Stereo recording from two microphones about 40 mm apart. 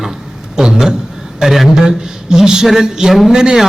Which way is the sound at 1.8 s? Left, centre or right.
Centre.